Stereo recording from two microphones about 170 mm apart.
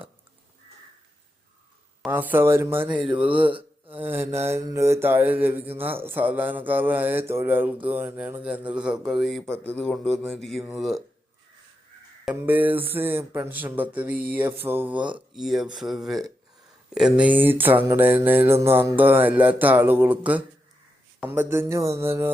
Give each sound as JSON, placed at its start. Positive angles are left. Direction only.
{"t": 2.0, "sound": "speech", "side_deg": -10}
{"t": 3.5, "sound": "a sound", "side_deg": -30}
{"t": 4.0, "sound": "mantra", "side_deg": -15}
{"t": 4.4, "sound": "speech", "side_deg": -15}
{"t": 12.2, "sound": "speech", "side_deg": -10}